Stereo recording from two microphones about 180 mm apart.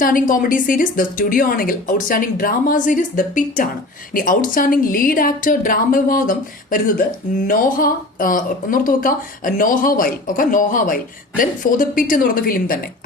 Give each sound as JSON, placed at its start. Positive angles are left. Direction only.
{"t": 0.0, "sound": "speech", "side_deg": 50}